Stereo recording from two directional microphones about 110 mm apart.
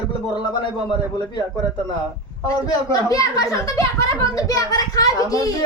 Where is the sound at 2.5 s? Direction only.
35° left (ahead or behind).